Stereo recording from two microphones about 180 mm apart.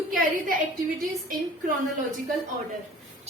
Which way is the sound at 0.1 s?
50° right (ahead or behind).